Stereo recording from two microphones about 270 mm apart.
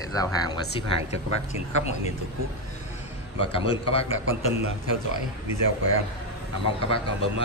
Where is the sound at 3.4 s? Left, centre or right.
Centre.